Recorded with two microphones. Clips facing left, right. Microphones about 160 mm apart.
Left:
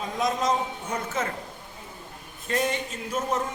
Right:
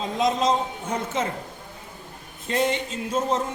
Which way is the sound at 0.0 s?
25° right (ahead or behind).